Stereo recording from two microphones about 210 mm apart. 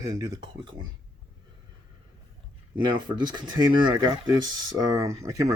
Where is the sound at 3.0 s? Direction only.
20° right (ahead or behind).